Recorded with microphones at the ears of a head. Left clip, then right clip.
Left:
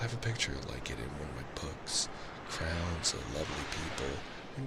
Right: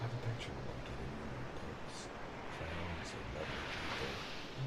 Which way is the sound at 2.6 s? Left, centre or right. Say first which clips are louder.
Left 9 dB; left.